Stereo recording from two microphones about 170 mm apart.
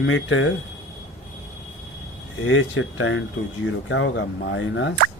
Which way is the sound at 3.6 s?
90° left.